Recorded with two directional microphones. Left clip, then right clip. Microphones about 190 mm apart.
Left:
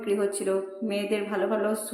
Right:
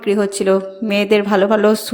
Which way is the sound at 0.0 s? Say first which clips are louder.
Right 10 dB; 40° right (ahead or behind).